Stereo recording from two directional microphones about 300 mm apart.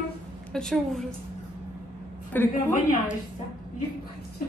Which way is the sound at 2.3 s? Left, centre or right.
Centre.